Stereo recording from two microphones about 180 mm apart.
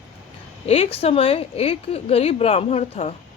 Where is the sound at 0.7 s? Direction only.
35° left (ahead or behind).